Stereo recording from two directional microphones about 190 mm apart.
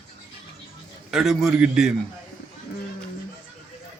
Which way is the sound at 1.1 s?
Centre (ahead or behind).